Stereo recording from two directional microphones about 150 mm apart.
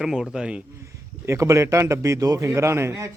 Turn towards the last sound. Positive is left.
turn(degrees=-15)  # may be behind; listen again after turning